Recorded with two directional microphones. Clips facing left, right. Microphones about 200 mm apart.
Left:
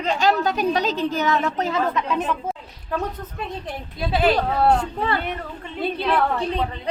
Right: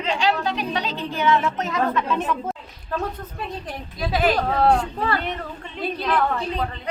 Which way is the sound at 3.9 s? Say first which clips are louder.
Left 1 dB; 30° left (ahead or behind).